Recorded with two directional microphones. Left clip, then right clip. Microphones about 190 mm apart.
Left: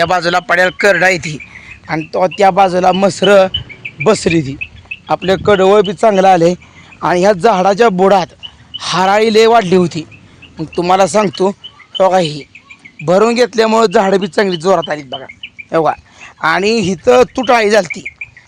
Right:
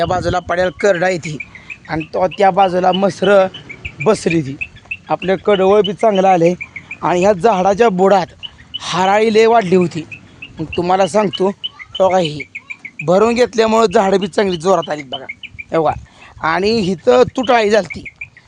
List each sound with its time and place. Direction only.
0.0 s a man's voice: 5° left (ahead or behind)
1.9 s speech: 35° left (ahead or behind)